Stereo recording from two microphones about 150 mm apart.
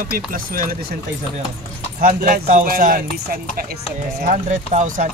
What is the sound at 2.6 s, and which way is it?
Speech, 70° right (ahead or behind).